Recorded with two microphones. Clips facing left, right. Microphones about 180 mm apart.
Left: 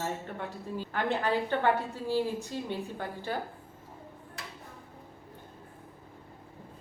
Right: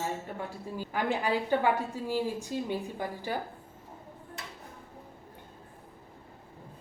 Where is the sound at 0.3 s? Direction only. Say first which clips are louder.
Even; 10° right (ahead or behind).